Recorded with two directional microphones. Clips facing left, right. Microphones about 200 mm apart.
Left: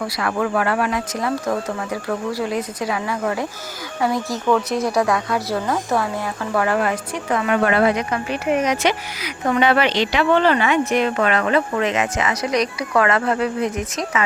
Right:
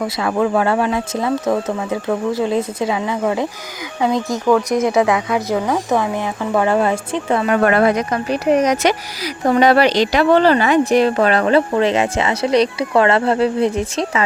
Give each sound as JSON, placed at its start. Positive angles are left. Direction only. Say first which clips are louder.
{"t": 0.0, "sound": "a woman's voice", "louder": "right 4 dB", "side_deg": -20}
{"t": 7.6, "sound": "speech", "louder": "right 3 dB", "side_deg": -45}